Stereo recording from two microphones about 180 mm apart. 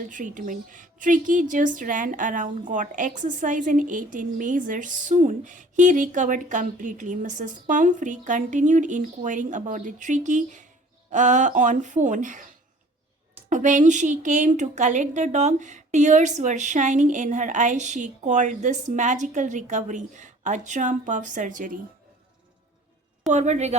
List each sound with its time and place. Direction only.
0.0 s speech: 45° right (ahead or behind)
13.5 s speech: 45° right (ahead or behind)
23.3 s a woman's voice: 40° right (ahead or behind)